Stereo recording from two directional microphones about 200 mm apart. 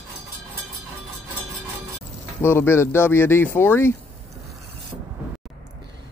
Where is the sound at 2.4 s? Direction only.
10° left (ahead or behind).